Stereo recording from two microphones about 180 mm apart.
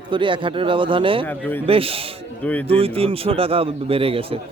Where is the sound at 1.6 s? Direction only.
30° right (ahead or behind).